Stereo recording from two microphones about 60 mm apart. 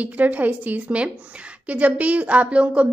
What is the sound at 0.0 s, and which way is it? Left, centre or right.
A woman's voice, right.